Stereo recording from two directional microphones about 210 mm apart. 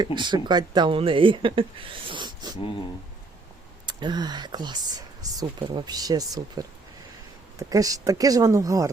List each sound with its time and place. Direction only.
0.2 s speech: 20° right (ahead or behind)
3.8 s speech: 20° right (ahead or behind)
7.7 s speech: 15° right (ahead or behind)